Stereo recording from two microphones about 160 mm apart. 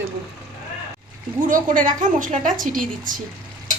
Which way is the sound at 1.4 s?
55° right (ahead or behind).